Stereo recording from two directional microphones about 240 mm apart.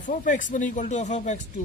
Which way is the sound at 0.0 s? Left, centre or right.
Left.